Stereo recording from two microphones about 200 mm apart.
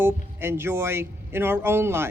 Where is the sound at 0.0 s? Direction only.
10° right (ahead or behind).